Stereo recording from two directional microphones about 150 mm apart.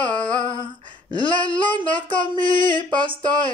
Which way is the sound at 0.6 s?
30° right (ahead or behind).